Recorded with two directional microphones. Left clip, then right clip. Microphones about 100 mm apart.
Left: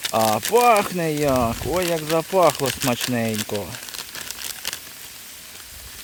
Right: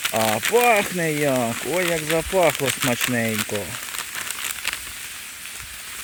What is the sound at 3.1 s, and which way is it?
Speech, 10° left (ahead or behind).